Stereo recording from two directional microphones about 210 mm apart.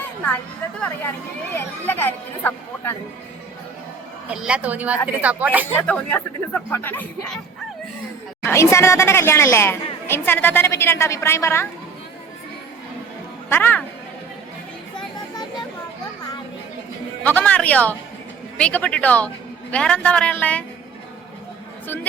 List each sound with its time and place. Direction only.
1.5 s a woman's voice: 10° left (ahead or behind)
4.4 s a woman's voice: 5° right (ahead or behind)
5.7 s a woman's voice: 5° left (ahead or behind)
8.4 s a woman's voice: 10° left (ahead or behind)
13.5 s a woman's voice: 10° left (ahead or behind)
14.9 s a sound: 20° left (ahead or behind)
17.2 s a woman's voice: 5° left (ahead or behind)